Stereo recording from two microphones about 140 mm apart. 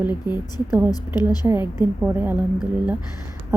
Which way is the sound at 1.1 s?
30° left (ahead or behind).